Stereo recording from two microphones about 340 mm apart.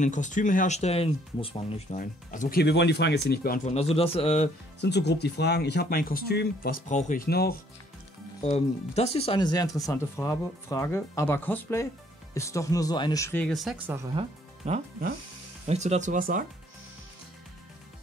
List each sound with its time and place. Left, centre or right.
0.0 s speech: left
4.7 s speech: left; by 14.2 s centre
14.7 s speech: right